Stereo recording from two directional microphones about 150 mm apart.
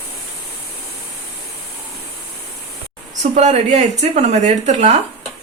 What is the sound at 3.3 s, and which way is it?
Speech, 50° right (ahead or behind).